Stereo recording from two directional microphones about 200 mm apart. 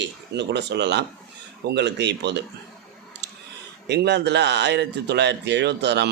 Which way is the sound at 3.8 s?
55° right (ahead or behind).